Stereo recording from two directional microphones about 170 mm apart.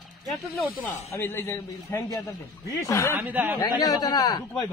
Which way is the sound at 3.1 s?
10° right (ahead or behind).